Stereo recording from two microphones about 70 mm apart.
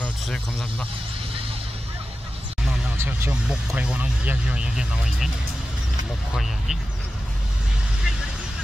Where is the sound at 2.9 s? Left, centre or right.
Right; by 5.3 s centre.